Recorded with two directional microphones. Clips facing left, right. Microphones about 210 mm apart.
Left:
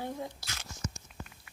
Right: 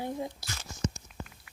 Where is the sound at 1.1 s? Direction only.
Centre (ahead or behind).